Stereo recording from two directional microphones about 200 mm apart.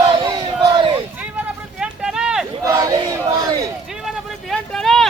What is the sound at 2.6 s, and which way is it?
Crowd, 15° right (ahead or behind).